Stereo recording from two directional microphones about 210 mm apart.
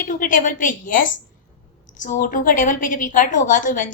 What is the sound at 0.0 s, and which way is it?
A woman's voice, 40° left (ahead or behind).